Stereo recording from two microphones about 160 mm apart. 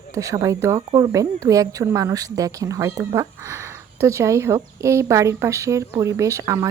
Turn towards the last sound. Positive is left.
turn(degrees=-20)  # may be behind; listen again after turning